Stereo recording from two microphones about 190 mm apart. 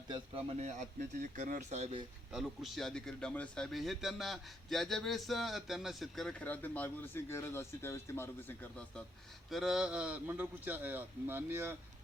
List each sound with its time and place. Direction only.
0.1 s speech: 35° right (ahead or behind)
2.3 s a man's voice: centre (ahead or behind)
9.5 s a man's voice: centre (ahead or behind)